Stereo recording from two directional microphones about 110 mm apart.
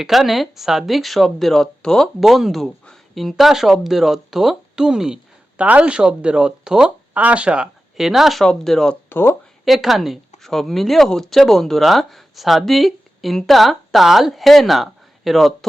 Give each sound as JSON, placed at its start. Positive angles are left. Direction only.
{"t": 0.0, "sound": "speech", "side_deg": 0}
{"t": 9.0, "sound": "speech", "side_deg": 20}
{"t": 9.6, "sound": "speech", "side_deg": 0}